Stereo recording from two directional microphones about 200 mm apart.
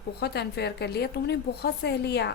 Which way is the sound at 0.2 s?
55° left (ahead or behind).